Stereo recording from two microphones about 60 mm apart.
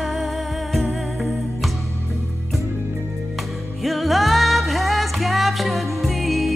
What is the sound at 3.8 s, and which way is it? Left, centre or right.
Music, centre.